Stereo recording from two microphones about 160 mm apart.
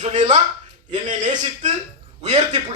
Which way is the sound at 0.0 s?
45° right (ahead or behind).